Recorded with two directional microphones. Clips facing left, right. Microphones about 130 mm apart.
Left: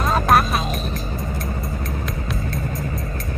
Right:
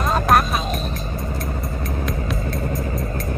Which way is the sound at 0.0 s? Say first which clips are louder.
Even; centre (ahead or behind).